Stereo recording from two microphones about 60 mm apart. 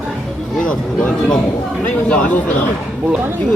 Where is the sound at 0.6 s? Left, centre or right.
Centre.